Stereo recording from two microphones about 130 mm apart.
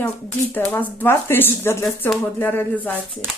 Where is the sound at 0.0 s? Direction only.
15° left (ahead or behind).